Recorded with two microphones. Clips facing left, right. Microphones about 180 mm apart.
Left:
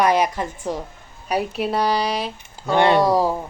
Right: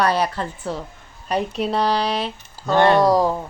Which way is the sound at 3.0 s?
5° left (ahead or behind).